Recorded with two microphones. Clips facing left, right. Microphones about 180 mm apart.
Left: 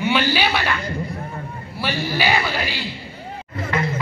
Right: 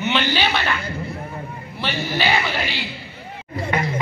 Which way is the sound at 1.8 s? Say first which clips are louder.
Left 1 dB; 10° left (ahead or behind).